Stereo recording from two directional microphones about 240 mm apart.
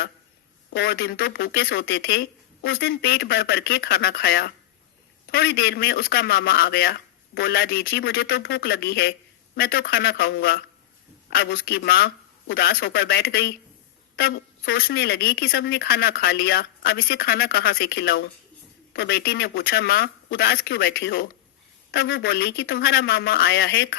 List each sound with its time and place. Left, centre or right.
0.7 s a woman's voice: left